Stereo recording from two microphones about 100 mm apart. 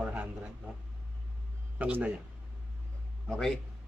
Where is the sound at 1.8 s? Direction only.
15° right (ahead or behind).